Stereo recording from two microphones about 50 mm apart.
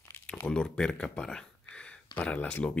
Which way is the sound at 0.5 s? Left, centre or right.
Centre.